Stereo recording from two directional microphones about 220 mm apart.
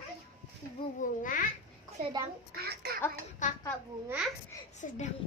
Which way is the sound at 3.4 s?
35° left (ahead or behind).